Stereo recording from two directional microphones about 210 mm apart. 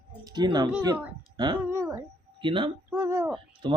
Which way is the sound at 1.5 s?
10° right (ahead or behind).